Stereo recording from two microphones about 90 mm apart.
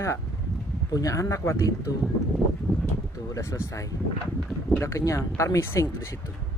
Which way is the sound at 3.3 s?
30° left (ahead or behind).